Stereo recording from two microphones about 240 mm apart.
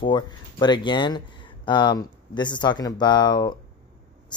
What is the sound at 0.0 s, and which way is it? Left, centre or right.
Speech, centre.